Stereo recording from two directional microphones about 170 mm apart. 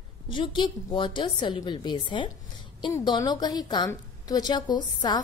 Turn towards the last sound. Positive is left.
turn(degrees=25)  # may be behind; listen again after turning